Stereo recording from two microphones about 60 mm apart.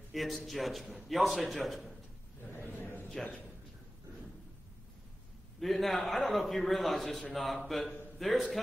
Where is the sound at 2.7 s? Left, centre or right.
Left.